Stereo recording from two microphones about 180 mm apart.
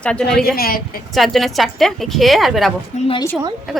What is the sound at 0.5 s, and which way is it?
Speech, 55° left (ahead or behind).